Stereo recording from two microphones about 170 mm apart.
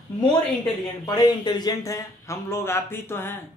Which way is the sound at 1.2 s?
25° left (ahead or behind).